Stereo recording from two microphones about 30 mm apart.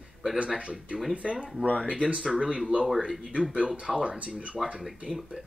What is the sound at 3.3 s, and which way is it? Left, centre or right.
Speech, right.